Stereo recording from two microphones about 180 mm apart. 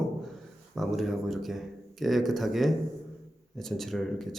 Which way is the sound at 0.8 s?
Centre (ahead or behind).